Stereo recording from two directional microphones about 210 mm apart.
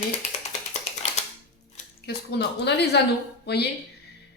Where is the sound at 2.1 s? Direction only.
55° left (ahead or behind).